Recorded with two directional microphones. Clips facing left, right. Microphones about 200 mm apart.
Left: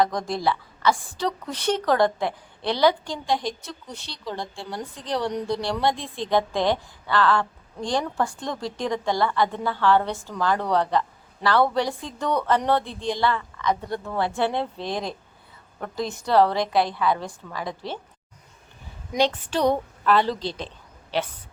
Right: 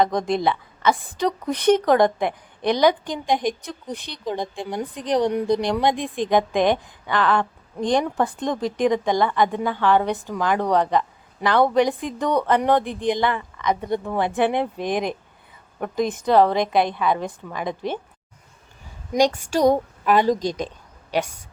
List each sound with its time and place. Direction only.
0.0 s a woman's voice: 20° right (ahead or behind)
19.1 s a woman's voice: 10° right (ahead or behind)
20.6 s a sound: 15° right (ahead or behind)